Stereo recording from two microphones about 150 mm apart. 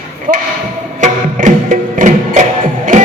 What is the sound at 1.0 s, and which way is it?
Music, 55° right (ahead or behind).